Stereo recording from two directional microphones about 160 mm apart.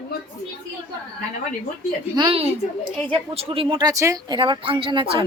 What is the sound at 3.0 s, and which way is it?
Speech, 35° right (ahead or behind).